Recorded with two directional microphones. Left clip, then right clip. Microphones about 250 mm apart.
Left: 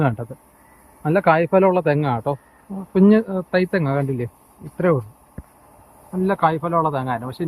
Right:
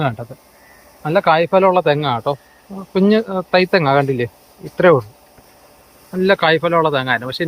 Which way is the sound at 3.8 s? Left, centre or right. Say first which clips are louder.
Right 9 dB; right.